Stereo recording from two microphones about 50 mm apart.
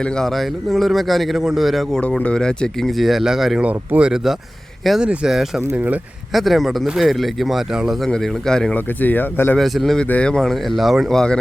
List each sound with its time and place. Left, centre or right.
0.3 s a man's voice: centre
2.0 s speech: left
3.0 s a man's voice: centre
3.6 s speech: right
4.8 s a man's voice: centre
5.7 s speech: right
6.3 s a man's voice: centre
8.0 s speech: centre
8.7 s speech: left
9.6 s a man's voice: centre
10.2 s speech: centre
10.5 s a man's voice: centre
11.1 s speech: centre